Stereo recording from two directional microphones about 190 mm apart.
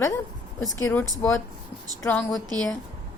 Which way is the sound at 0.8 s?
15° left (ahead or behind).